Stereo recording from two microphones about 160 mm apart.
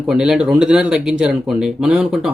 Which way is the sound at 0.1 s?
5° right (ahead or behind).